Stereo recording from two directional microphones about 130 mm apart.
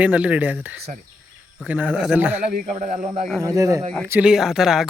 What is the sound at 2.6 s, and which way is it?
Speech, 85° right.